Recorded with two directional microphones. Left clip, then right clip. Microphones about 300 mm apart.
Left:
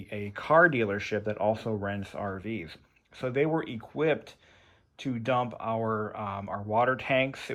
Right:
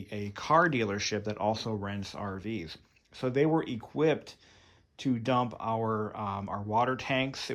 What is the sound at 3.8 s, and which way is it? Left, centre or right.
Speech, centre.